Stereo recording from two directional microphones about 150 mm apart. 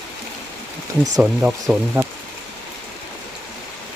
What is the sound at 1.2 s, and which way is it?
Speech, 10° right (ahead or behind).